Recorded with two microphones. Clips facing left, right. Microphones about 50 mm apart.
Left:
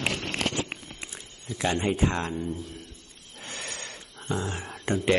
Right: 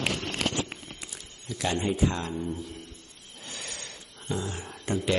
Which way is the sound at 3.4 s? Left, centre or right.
Left.